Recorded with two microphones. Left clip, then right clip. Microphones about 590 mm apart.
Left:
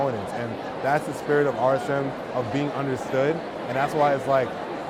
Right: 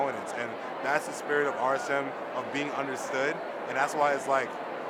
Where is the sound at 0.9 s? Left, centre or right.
Left.